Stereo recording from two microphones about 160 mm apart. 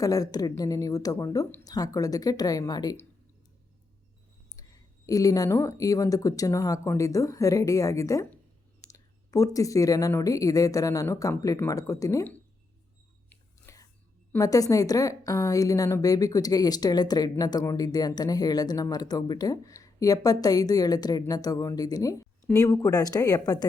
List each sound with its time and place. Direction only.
0.0 s a woman's voice: 20° left (ahead or behind)
5.0 s a woman's voice: 20° left (ahead or behind)
13.3 s biting: 20° left (ahead or behind)
14.3 s a woman's voice: 20° left (ahead or behind)